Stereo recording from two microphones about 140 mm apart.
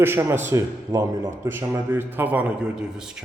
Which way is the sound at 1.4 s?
15° right (ahead or behind).